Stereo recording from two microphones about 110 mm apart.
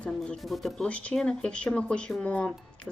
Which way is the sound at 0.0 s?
5° left (ahead or behind).